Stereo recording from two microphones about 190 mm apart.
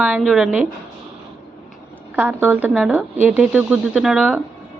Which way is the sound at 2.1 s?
10° right (ahead or behind).